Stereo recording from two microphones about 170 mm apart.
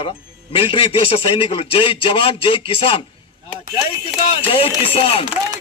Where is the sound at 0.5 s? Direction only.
30° left (ahead or behind).